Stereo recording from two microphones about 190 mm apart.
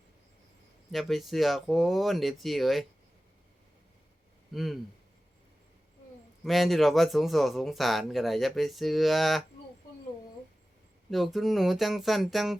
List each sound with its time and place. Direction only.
0.9 s speech: centre (ahead or behind)
4.5 s speech: centre (ahead or behind)
6.4 s speech: centre (ahead or behind)
11.1 s speech: centre (ahead or behind)